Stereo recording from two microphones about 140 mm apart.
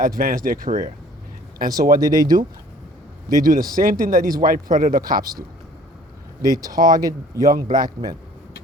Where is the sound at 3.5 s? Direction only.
90° right.